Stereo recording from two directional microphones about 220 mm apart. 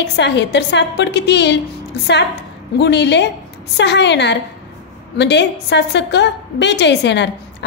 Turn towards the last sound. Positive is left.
turn(degrees=50)  # may be behind; listen again after turning